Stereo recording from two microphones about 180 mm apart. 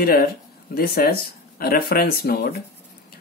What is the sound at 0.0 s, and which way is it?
Speech, 55° left (ahead or behind).